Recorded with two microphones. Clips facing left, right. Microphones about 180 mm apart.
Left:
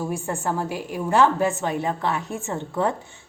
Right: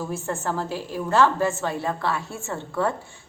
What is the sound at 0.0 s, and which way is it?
A woman's voice, 15° left (ahead or behind).